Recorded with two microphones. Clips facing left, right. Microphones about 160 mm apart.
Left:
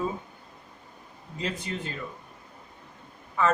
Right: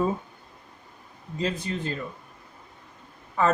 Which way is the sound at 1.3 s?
40° right (ahead or behind).